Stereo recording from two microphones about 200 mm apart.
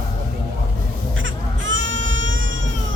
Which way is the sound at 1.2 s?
75° right (ahead or behind).